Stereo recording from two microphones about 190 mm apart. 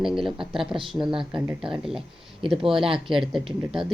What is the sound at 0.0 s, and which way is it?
Speech, centre (ahead or behind).